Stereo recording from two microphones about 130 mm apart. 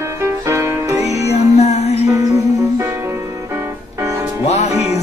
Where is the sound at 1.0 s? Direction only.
55° left (ahead or behind).